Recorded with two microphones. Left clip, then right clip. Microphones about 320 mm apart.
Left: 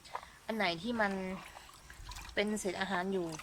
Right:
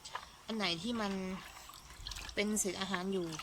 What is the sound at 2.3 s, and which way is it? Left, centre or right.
Speech, left.